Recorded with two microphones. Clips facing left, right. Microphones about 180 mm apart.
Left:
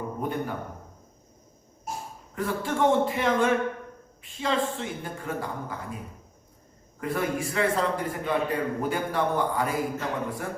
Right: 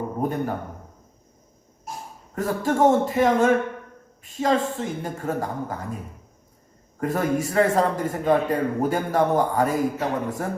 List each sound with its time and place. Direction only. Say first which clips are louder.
0.2 s a man's voice: right 5 dB; 40° right (ahead or behind)
2.3 s a man's voice: right 5 dB; 45° right (ahead or behind)
7.0 s a man's voice: right 5 dB; 45° right (ahead or behind)